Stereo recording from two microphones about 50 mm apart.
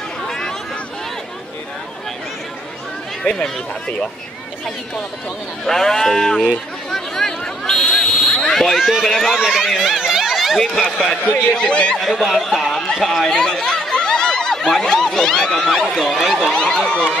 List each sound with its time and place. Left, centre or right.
0.3 s chatter: centre
3.3 s speech: centre
5.7 s speech: centre
6.9 s a sound: centre
7.9 s fire alarm: centre
9.0 s speech: centre
9.4 s speech: centre
9.7 s a sound: centre
11.5 s speech: centre
12.0 s speech: centre
13.4 s a sound: centre
13.9 s speech: centre
16.4 s speech: centre